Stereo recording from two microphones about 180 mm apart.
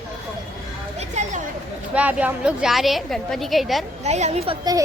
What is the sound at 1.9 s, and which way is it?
A woman's voice, 5° right (ahead or behind).